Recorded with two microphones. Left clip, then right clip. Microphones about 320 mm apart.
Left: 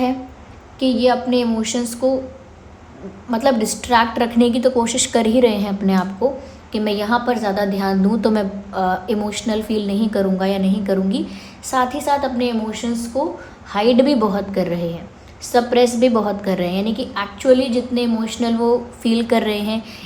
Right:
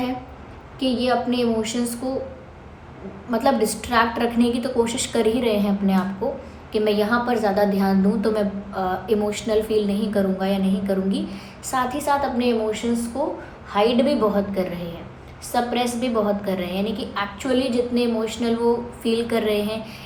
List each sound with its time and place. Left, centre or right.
0.8 s a woman's voice: left
3.2 s a woman's voice: left